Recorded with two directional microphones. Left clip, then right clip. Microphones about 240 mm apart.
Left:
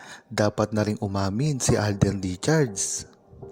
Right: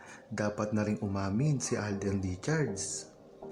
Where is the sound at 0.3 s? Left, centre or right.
Left.